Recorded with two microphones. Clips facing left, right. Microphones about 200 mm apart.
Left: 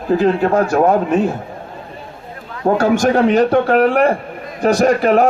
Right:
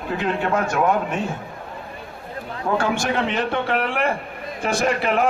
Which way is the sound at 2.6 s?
40° left (ahead or behind).